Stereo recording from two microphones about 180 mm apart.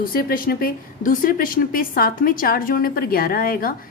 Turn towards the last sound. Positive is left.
turn(degrees=55)  # may be behind; listen again after turning